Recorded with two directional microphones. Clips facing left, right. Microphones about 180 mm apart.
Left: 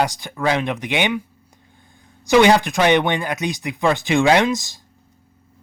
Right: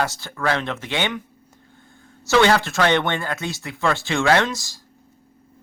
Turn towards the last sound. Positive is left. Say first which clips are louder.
# left 3 dB
turn(degrees=20)  # may be behind; listen again after turning